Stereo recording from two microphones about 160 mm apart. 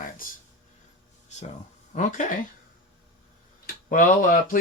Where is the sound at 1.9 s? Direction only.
50° left (ahead or behind).